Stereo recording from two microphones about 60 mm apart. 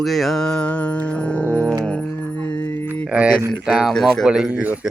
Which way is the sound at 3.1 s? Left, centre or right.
Right.